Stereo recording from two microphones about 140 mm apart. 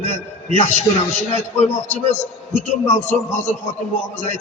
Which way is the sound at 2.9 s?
60° left (ahead or behind).